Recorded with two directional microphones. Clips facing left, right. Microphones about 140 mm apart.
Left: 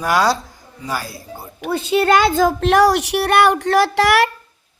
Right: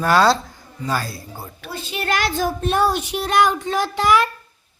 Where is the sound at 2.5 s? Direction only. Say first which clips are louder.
Left 6 dB; 90° left; by 4.2 s 75° left (ahead or behind).